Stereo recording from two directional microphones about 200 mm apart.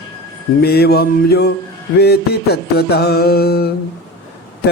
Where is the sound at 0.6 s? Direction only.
55° left (ahead or behind).